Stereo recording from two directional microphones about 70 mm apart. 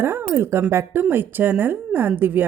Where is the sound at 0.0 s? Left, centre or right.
Right.